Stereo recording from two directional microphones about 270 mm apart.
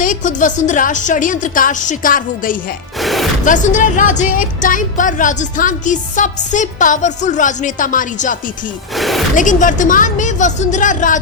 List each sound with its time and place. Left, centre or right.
0.0 s speech: left
3.0 s speech: centre
3.4 s speech: left
9.0 s speech: centre
9.3 s speech: left